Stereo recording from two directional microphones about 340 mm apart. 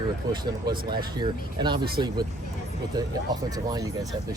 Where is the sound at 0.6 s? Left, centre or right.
Right.